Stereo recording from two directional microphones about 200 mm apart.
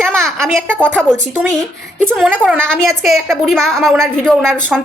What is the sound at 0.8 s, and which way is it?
Speech, 5° left (ahead or behind).